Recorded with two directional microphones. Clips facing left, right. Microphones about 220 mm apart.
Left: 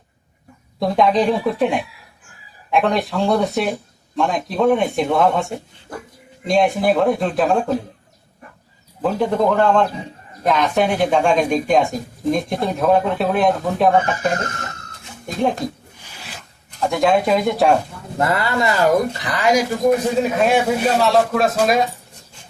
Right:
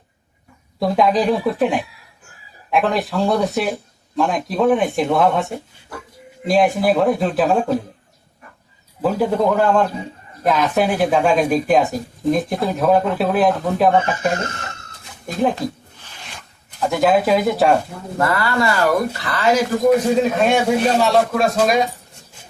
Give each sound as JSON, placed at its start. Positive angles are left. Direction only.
{"t": 0.8, "sound": "speech", "side_deg": 0}
{"t": 9.0, "sound": "speech", "side_deg": -5}
{"t": 15.3, "sound": "speech", "side_deg": 0}
{"t": 16.8, "sound": "speech", "side_deg": 0}
{"t": 18.2, "sound": "speech", "side_deg": 20}
{"t": 20.3, "sound": "speech", "side_deg": 5}